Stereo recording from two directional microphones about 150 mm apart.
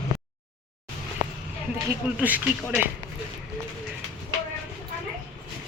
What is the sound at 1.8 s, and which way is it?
Speech, 10° right (ahead or behind).